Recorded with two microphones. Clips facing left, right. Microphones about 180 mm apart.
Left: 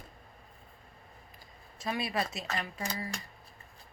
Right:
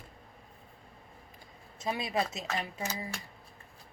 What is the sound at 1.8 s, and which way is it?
Speech, 20° right (ahead or behind).